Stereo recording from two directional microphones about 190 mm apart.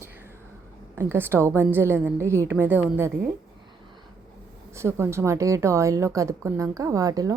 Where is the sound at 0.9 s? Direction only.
10° right (ahead or behind).